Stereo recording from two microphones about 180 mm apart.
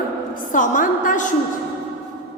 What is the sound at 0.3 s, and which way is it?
Speech, 45° left (ahead or behind).